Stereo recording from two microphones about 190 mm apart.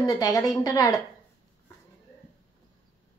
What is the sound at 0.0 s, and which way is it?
Speech, 20° left (ahead or behind).